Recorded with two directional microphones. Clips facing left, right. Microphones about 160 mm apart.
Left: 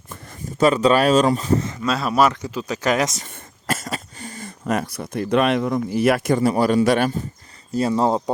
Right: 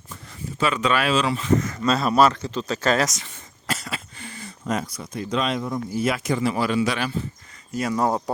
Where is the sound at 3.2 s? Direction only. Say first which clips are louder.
Left 4 dB; 50° left (ahead or behind); by 5.8 s 80° left.